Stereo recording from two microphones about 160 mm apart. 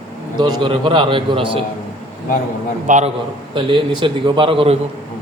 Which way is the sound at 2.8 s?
45° right (ahead or behind).